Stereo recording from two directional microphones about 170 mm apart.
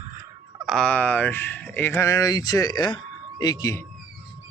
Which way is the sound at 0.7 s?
5° left (ahead or behind).